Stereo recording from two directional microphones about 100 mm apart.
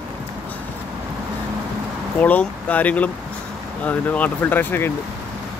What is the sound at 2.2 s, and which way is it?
Speech, 15° left (ahead or behind).